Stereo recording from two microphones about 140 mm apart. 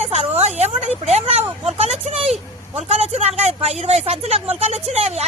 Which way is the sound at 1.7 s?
50° right (ahead or behind).